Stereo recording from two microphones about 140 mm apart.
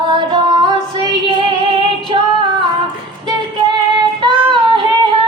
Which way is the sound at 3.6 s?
35° right (ahead or behind).